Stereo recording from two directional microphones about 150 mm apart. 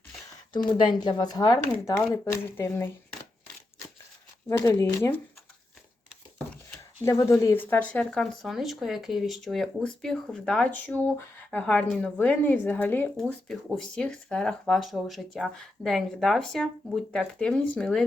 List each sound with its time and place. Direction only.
0.5 s speech: 30° left (ahead or behind)
2.6 s speech: 15° left (ahead or behind)
4.4 s speech: 20° left (ahead or behind)
7.0 s speech: 20° left (ahead or behind); by 18.0 s 5° left (ahead or behind)